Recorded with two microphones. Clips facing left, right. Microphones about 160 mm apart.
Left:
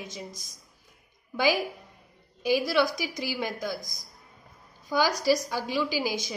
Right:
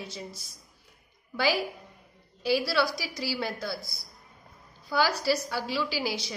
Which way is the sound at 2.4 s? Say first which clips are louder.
Left 2 dB; 15° left (ahead or behind).